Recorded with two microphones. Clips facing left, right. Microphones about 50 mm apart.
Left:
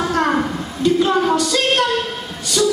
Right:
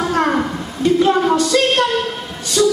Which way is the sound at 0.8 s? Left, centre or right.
Right.